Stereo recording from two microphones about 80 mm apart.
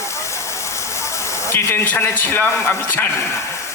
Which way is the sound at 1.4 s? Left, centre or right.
Left.